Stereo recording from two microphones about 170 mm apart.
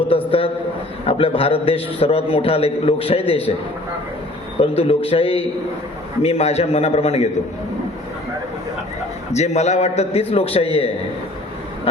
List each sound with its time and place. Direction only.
0.3 s a man's voice: 35° left (ahead or behind)
4.6 s a man's voice: 35° left (ahead or behind)
9.3 s a man's voice: 40° left (ahead or behind)